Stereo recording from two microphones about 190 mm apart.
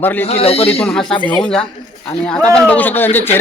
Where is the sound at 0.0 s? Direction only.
10° left (ahead or behind).